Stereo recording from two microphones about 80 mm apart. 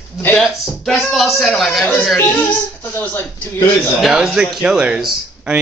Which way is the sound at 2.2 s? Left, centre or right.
Left.